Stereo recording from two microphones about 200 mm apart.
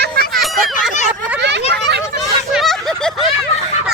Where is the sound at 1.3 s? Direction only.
60° right (ahead or behind).